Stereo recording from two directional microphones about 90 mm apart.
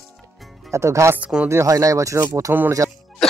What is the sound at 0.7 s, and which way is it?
Speech, 30° right (ahead or behind).